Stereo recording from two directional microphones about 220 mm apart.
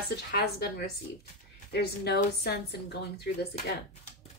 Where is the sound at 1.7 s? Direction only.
50° left (ahead or behind).